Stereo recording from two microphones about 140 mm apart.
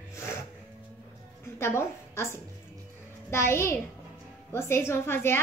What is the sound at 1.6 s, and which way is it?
A woman's voice, 20° left (ahead or behind).